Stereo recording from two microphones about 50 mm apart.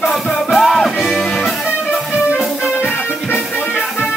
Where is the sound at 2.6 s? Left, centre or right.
Left.